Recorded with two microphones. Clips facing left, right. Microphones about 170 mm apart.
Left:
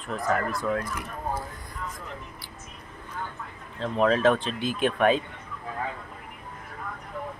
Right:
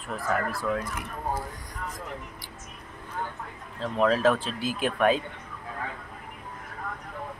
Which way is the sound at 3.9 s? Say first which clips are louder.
Left 1 dB; centre (ahead or behind).